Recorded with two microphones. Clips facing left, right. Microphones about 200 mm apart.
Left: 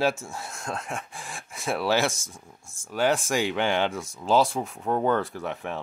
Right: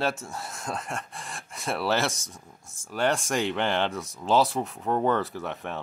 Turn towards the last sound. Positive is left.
turn(degrees=0)  # may be behind; listen again after turning